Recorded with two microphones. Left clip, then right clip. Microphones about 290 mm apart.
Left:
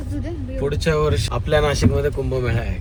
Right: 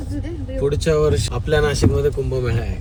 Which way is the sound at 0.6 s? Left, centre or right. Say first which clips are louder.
Right 3 dB; centre.